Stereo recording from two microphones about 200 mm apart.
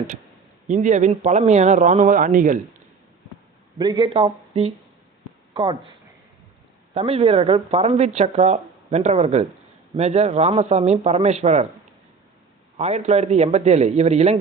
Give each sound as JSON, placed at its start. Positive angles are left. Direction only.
{"t": 0.7, "sound": "speech", "side_deg": -35}
{"t": 3.8, "sound": "speech", "side_deg": -20}
{"t": 6.9, "sound": "speech", "side_deg": -30}
{"t": 12.8, "sound": "speech", "side_deg": -35}